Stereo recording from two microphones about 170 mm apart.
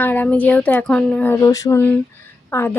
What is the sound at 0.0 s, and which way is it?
Speech, 10° left (ahead or behind).